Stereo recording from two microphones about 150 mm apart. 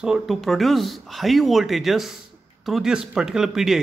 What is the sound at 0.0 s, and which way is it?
Speech, centre (ahead or behind).